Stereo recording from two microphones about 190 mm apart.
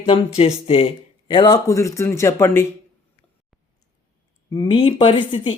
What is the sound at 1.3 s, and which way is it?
Speech, 20° left (ahead or behind).